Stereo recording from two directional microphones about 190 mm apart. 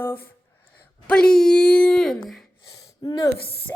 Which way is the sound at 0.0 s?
10° left (ahead or behind).